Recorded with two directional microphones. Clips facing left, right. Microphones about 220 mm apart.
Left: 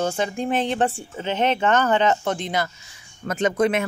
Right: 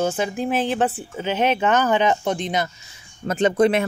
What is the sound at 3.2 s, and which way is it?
Speech, 30° right (ahead or behind).